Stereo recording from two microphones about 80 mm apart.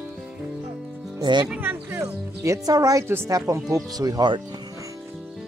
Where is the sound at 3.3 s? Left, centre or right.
Right.